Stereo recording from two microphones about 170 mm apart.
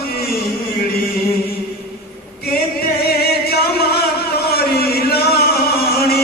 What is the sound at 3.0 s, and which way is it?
Music, 65° left (ahead or behind).